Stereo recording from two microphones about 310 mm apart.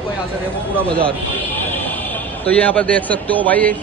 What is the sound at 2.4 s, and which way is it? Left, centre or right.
A man's voice, centre.